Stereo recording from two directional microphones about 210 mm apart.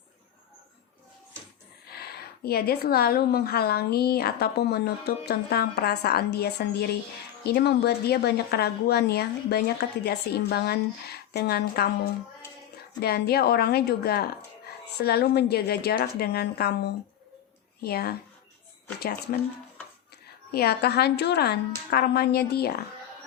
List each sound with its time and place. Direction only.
2.0 s a woman's voice: 50° left (ahead or behind)
13.0 s a woman's voice: 50° left (ahead or behind)
20.5 s a woman's voice: 50° left (ahead or behind)